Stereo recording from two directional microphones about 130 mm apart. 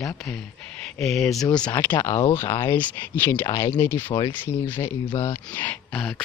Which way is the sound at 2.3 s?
20° left (ahead or behind).